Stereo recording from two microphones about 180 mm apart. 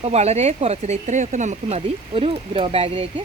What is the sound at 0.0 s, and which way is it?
Speech, 35° right (ahead or behind).